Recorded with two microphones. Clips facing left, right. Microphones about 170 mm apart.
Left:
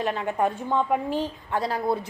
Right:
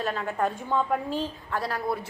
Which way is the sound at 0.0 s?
20° left (ahead or behind).